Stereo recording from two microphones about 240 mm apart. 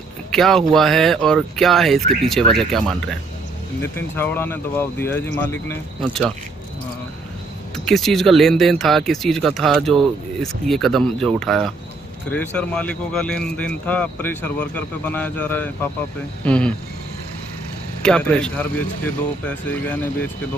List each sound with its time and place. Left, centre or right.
0.3 s a man's voice: centre
4.2 s speech: centre
7.7 s a man's voice: centre
18.0 s a man's voice: centre